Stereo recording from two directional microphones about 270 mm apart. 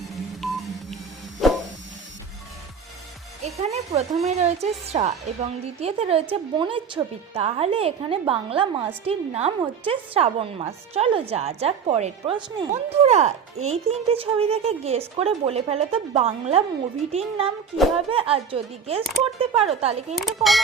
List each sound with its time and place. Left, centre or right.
0.1 s telephone dialing: centre
1.4 s a sound: centre
3.4 s a woman's voice: right
20.1 s speech: centre